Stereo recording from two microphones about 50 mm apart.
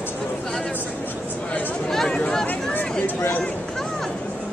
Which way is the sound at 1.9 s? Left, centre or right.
Centre.